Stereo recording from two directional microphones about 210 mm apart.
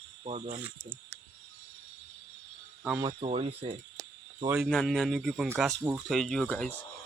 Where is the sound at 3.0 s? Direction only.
25° right (ahead or behind).